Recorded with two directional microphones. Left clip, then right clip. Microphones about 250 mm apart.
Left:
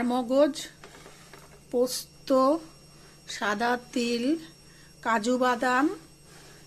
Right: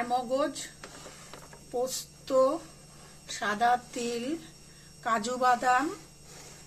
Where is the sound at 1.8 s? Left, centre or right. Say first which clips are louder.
Left 5 dB; left.